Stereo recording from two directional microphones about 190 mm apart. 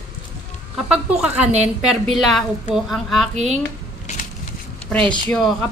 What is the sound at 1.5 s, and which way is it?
Speech, 35° right (ahead or behind).